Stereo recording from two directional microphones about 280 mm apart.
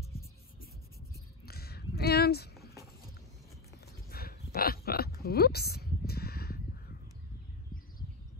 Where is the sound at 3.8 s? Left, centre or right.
Left.